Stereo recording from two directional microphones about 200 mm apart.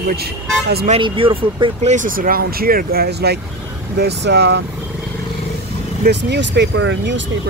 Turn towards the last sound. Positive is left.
turn(degrees=-65)  # may be behind; listen again after turning